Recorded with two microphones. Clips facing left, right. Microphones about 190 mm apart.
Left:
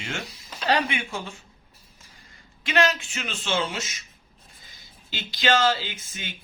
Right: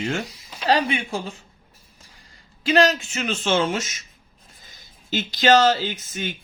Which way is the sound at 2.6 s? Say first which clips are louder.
Right 5 dB; 35° right (ahead or behind).